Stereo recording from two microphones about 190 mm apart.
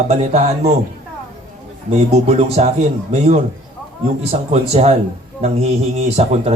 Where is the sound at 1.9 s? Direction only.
35° right (ahead or behind).